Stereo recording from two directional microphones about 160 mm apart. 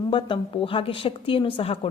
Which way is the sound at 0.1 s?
35° left (ahead or behind).